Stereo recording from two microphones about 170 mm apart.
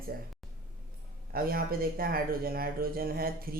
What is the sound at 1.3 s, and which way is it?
Speech, 60° right (ahead or behind).